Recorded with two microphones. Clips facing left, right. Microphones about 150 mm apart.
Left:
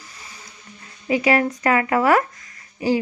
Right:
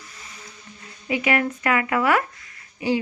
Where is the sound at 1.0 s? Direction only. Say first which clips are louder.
Left 4 dB; 35° left (ahead or behind).